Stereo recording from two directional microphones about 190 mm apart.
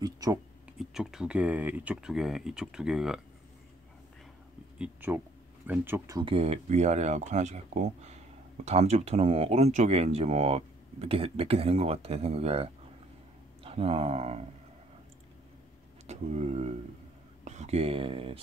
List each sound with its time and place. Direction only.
0.0 s a sound: 20° right (ahead or behind)
0.7 s speech: centre (ahead or behind)
4.7 s speech: 10° right (ahead or behind)
6.1 s speech: 30° right (ahead or behind)
13.7 s speech: 30° right (ahead or behind)
16.1 s speech: 35° right (ahead or behind)